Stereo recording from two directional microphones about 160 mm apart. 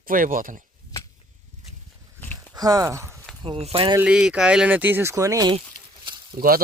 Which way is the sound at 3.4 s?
35° right (ahead or behind).